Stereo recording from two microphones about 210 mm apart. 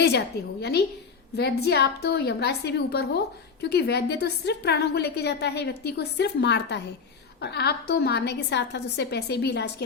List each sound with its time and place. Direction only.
0.0 s a woman's voice: 55° left (ahead or behind)